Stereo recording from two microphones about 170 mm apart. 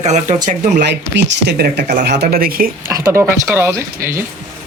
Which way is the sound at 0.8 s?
90° right.